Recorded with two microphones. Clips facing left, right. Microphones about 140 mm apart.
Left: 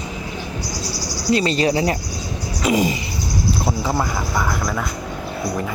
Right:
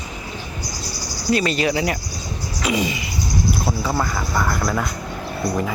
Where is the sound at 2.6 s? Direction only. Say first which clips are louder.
Left 4 dB; 40° left (ahead or behind).